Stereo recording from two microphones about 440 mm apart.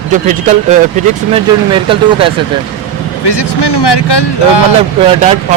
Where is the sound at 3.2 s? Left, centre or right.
Left.